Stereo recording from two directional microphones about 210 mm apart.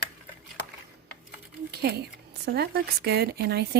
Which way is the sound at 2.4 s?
50° right (ahead or behind).